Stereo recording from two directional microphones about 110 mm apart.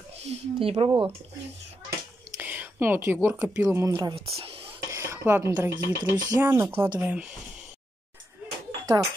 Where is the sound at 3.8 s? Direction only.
30° right (ahead or behind).